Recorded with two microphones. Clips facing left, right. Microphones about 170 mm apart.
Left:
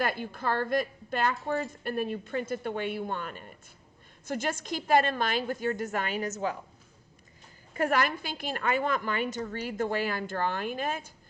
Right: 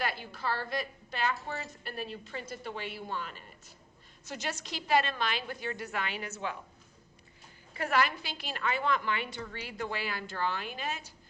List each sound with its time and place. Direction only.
0.0 s a woman's voice: 50° left (ahead or behind)
7.7 s a woman's voice: 45° left (ahead or behind)